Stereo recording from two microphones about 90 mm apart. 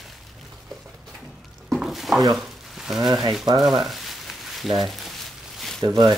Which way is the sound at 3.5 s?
50° right (ahead or behind).